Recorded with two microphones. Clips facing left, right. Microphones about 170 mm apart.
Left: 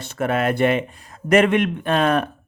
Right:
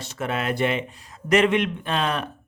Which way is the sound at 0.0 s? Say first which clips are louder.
Left 6 dB; 55° left (ahead or behind).